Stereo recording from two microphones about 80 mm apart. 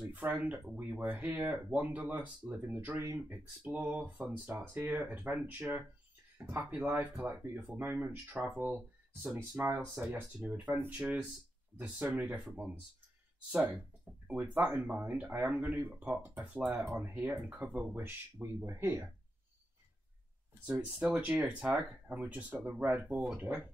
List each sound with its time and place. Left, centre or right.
0.0 s speech: centre
6.3 s speech: right
14.2 s speech: centre
20.6 s speech: centre